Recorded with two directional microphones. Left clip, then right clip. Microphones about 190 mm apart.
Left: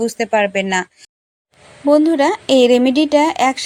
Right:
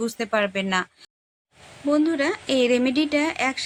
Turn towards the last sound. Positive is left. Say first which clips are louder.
# left 9 dB
turn(degrees=25)  # may be behind; listen again after turning